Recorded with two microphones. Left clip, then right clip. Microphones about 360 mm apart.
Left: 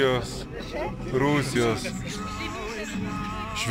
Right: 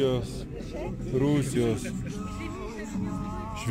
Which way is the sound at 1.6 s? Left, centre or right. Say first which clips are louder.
Left 4 dB; centre.